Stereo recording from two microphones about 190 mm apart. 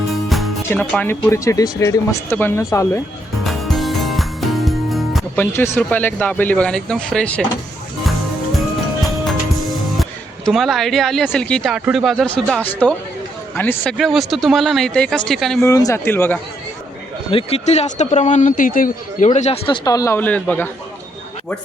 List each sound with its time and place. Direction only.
0.1 s music: centre (ahead or behind)
0.7 s speech: 5° left (ahead or behind)
3.4 s music: centre (ahead or behind)
5.5 s speech: 10° left (ahead or behind)
10.0 s speech: centre (ahead or behind)
15.6 s speech: 15° left (ahead or behind)
17.3 s a man's voice: 35° left (ahead or behind); by 20.7 s 10° left (ahead or behind)